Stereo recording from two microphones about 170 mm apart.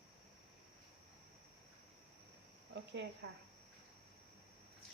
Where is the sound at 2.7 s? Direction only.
90° right.